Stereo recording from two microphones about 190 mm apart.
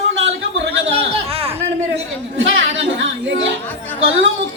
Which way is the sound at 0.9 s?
30° right (ahead or behind).